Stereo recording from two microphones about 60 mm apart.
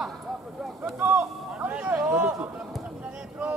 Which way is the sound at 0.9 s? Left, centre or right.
Right.